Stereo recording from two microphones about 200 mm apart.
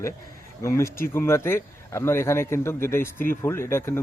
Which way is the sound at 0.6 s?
15° left (ahead or behind).